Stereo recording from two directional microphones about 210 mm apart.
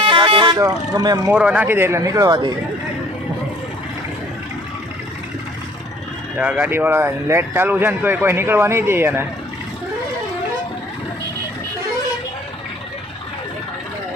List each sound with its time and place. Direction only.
0.0 s speech: 25° right (ahead or behind)
1.3 s speech: 5° right (ahead or behind)
6.3 s speech: 5° right (ahead or behind)